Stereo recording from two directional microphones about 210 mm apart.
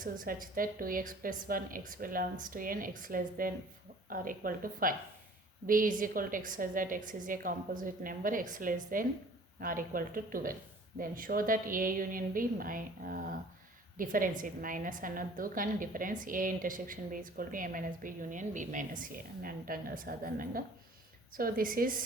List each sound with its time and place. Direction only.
0.0 s a woman's voice: 40° right (ahead or behind)